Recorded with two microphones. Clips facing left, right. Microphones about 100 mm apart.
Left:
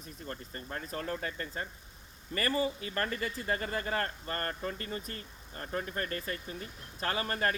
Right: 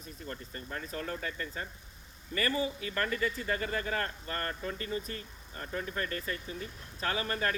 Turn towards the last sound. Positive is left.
turn(degrees=40)  # may be behind; listen again after turning